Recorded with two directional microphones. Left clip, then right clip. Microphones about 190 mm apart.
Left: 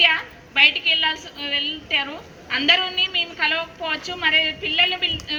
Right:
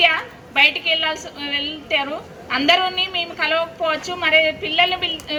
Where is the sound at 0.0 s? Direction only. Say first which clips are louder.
Right 1 dB; 60° right (ahead or behind).